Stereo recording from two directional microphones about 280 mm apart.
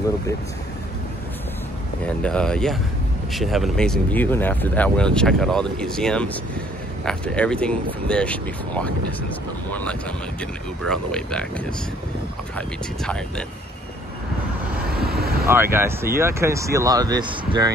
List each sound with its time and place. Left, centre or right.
2.2 s speech: centre
15.0 s vehicle: right
15.4 s speech: centre